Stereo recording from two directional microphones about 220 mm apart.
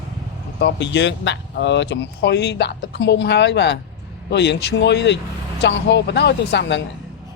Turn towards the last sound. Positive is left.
turn(degrees=50)  # may be behind; listen again after turning